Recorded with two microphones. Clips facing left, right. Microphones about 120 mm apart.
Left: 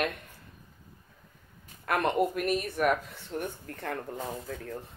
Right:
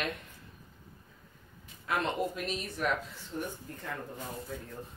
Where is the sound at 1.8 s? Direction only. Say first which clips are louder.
Left 5 dB; 60° left (ahead or behind).